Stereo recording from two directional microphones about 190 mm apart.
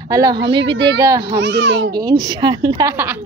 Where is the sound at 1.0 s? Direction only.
15° right (ahead or behind).